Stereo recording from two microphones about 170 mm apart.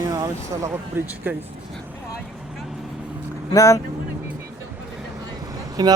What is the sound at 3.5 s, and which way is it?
Speech, 20° left (ahead or behind).